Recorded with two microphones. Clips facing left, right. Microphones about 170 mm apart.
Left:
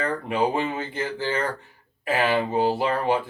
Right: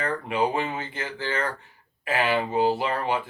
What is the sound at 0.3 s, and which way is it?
Speech, 40° left (ahead or behind).